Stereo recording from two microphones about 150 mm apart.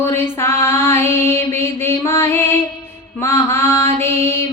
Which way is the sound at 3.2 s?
15° left (ahead or behind).